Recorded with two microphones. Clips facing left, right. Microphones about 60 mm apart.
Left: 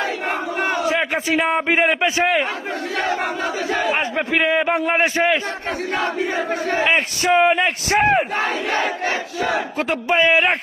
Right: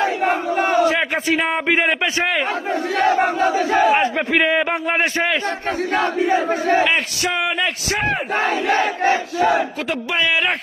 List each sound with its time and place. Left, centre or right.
0.3 s battle cry: centre
0.9 s a man's voice: centre
3.2 s crowd: right
3.9 s a man's voice: centre
6.2 s a man's voice: centre
6.8 s speech: left
9.9 s speech: left